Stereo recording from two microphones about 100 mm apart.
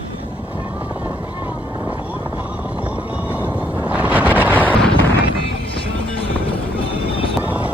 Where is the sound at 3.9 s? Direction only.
15° right (ahead or behind).